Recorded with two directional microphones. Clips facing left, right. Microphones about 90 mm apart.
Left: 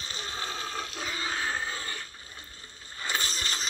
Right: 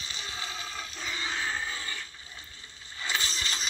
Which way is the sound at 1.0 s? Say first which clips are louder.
Even; 40° left (ahead or behind).